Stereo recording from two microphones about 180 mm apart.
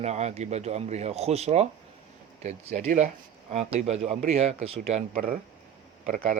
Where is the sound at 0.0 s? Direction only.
40° right (ahead or behind).